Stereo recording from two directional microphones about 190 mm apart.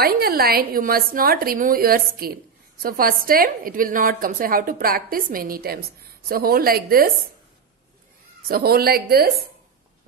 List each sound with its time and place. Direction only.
0.0 s a woman's voice: 50° right (ahead or behind)
8.5 s a woman's voice: 55° right (ahead or behind)